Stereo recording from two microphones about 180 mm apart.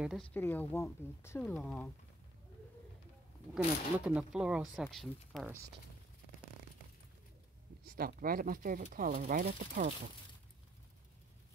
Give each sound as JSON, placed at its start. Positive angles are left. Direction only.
{"t": 0.0, "sound": "speech", "side_deg": 0}
{"t": 0.3, "sound": "speech", "side_deg": 10}
{"t": 3.5, "sound": "speech", "side_deg": -5}
{"t": 7.8, "sound": "speech", "side_deg": -55}